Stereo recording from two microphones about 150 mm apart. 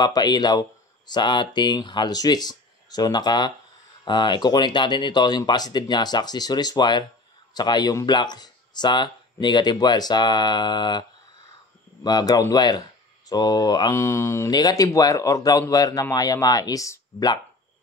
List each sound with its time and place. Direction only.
0.0 s speech: 25° left (ahead or behind)